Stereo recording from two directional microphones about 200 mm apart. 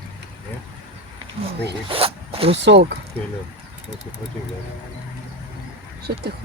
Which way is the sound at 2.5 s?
60° right (ahead or behind).